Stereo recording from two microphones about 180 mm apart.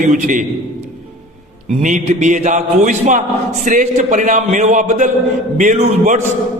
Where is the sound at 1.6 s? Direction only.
40° right (ahead or behind).